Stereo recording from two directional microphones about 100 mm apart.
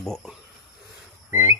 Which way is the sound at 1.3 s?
25° right (ahead or behind).